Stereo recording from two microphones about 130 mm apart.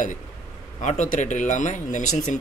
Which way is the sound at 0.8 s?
70° left (ahead or behind).